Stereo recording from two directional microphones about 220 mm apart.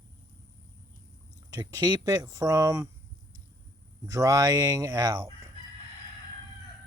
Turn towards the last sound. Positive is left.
turn(degrees=-15)  # may be behind; listen again after turning